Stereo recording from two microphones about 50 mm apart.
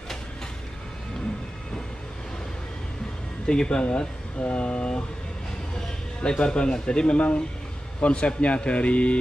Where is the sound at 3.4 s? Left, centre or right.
Centre.